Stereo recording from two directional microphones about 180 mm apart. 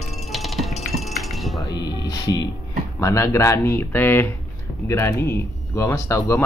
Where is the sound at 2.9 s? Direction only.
15° left (ahead or behind).